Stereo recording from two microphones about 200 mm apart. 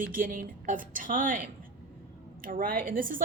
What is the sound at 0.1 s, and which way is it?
A woman's voice, 45° right (ahead or behind).